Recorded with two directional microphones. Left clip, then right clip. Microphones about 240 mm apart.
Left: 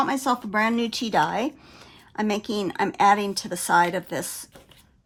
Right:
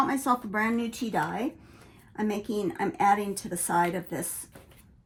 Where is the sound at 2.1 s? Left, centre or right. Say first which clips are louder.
Left 5 dB; left.